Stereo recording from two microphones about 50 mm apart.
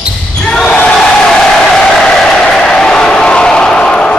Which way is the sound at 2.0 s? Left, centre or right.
Centre.